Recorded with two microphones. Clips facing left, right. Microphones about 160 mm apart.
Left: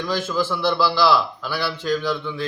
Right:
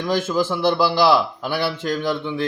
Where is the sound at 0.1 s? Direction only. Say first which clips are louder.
Right 4 dB; 50° right (ahead or behind).